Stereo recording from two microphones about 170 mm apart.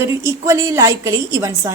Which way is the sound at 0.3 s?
20° right (ahead or behind).